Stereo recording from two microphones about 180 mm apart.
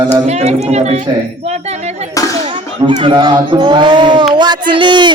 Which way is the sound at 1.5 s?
40° right (ahead or behind).